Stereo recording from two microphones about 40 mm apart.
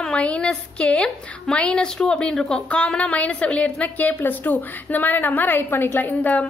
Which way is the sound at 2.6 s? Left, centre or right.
Left.